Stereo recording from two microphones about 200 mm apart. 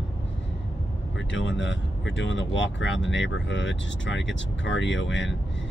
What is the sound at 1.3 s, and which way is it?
Speech, 65° left (ahead or behind).